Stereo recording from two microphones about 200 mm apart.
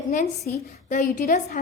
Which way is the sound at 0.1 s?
40° left (ahead or behind).